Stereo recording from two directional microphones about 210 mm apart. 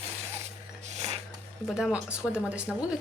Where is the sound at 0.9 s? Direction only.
30° right (ahead or behind).